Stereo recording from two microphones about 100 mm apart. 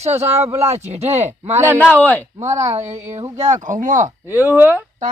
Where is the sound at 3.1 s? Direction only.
30° right (ahead or behind).